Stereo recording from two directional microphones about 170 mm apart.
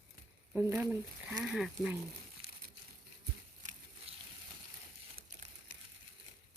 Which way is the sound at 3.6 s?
45° right (ahead or behind).